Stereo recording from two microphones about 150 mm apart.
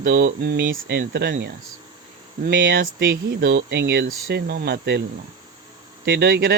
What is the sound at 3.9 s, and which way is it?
Speech, 90° right.